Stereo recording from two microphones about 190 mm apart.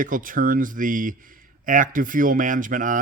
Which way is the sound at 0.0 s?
45° right (ahead or behind).